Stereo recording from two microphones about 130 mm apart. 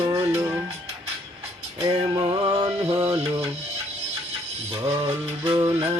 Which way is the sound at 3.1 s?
45° right (ahead or behind).